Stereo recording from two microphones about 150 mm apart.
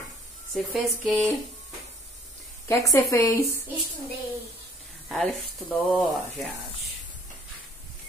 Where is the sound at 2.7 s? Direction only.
20° left (ahead or behind).